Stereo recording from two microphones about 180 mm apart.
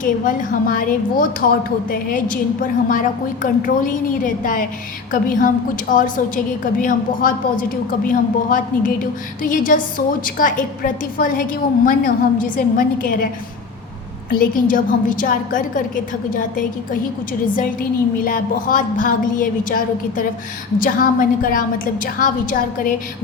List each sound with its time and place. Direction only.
0.0 s a woman's voice: 50° left (ahead or behind)
14.3 s a woman's voice: 50° left (ahead or behind)